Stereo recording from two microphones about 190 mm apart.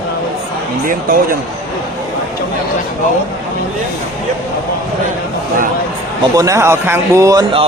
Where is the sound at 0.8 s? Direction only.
45° right (ahead or behind).